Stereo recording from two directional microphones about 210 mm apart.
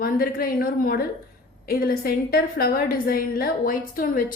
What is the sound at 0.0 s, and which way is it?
A woman's voice, 45° left (ahead or behind).